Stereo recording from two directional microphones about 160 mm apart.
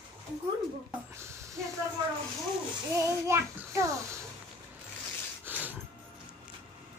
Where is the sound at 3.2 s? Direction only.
20° right (ahead or behind).